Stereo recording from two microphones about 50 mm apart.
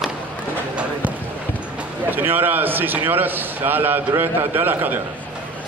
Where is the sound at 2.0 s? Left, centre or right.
Right.